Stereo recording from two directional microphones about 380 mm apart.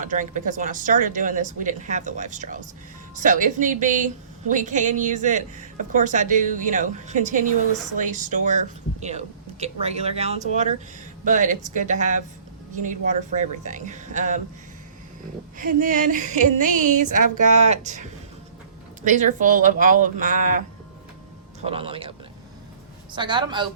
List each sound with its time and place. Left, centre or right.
0.0 s a woman's voice: centre
15.5 s a woman's voice: right
21.6 s speech: centre
23.1 s speech: centre